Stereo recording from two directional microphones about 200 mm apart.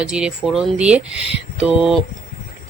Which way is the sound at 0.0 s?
5° right (ahead or behind).